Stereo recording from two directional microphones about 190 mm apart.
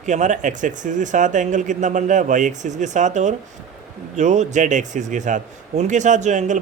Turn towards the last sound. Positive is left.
turn(degrees=-40)  # may be behind; listen again after turning